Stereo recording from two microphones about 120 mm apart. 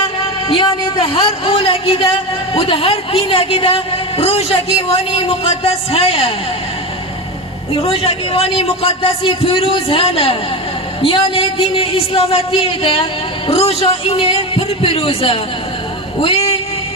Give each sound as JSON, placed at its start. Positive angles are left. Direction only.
{"t": 0.0, "sound": "a man's voice", "side_deg": 45}
{"t": 7.7, "sound": "a man's voice", "side_deg": 50}
{"t": 16.2, "sound": "a sound", "side_deg": 55}